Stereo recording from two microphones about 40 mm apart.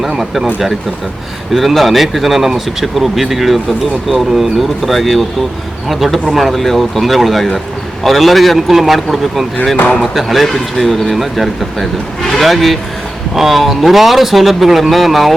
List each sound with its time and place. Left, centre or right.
1.5 s speech: centre